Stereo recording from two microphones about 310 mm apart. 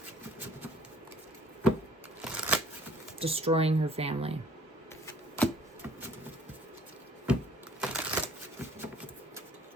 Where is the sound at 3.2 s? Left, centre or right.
Centre.